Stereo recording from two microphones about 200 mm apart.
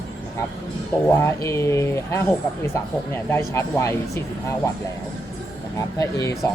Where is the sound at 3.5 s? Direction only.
15° left (ahead or behind).